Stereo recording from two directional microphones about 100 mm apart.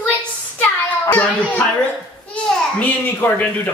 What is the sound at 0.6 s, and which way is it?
Child singing, 20° left (ahead or behind).